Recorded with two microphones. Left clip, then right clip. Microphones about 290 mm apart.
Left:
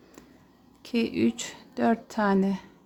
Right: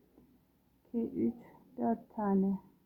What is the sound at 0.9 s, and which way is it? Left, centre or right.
Speech, left.